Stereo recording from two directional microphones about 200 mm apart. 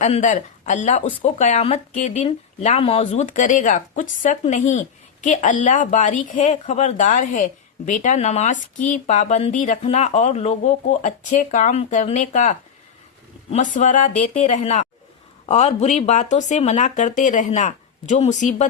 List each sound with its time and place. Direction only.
0.0 s speech: 40° left (ahead or behind)